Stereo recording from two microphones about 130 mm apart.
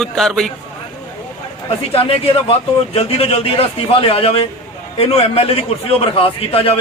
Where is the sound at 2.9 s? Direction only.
50° left (ahead or behind).